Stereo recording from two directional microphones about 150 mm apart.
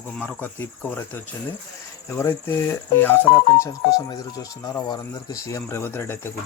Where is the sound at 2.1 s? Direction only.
20° left (ahead or behind).